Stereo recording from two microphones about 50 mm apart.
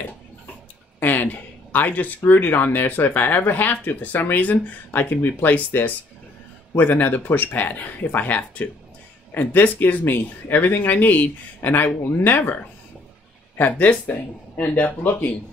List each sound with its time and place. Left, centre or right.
0.9 s speech: left
13.6 s speech: left